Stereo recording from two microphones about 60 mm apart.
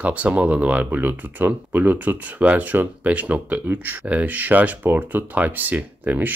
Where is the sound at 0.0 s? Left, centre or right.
Right.